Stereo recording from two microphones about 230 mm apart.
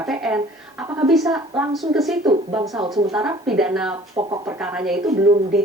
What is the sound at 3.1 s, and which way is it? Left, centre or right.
Speech, centre.